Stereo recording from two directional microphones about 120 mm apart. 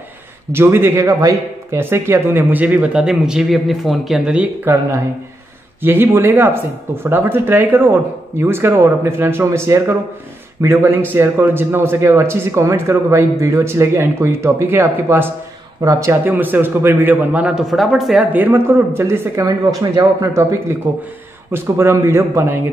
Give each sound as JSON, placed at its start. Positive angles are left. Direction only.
{"t": 0.5, "sound": "a man's voice", "side_deg": -20}
{"t": 5.8, "sound": "a man's voice", "side_deg": -20}
{"t": 18.3, "sound": "speech", "side_deg": -15}